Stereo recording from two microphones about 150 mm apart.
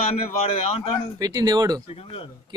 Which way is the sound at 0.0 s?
45° left (ahead or behind).